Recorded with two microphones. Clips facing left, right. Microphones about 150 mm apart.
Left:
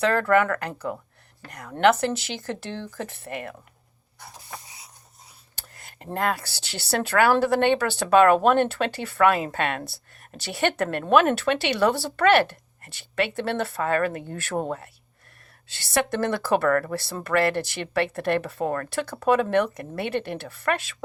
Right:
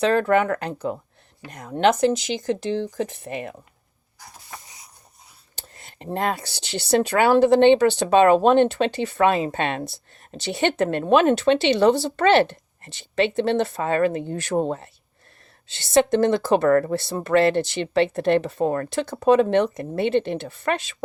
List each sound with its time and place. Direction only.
0.0 s speech: 20° right (ahead or behind)
5.5 s a sound: 20° right (ahead or behind)
6.1 s speech: 20° right (ahead or behind)